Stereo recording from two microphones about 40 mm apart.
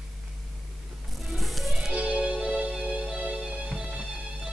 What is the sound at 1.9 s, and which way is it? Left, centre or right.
Music, right.